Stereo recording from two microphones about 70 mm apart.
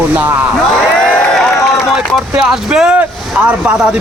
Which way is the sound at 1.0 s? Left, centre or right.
Centre.